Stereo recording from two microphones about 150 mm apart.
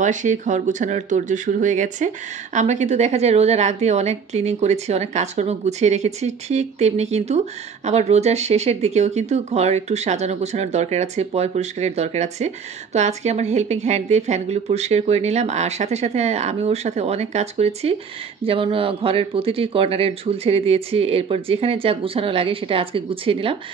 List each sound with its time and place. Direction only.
0.0 s a woman's voice: 55° right (ahead or behind); by 23.6 s 35° right (ahead or behind)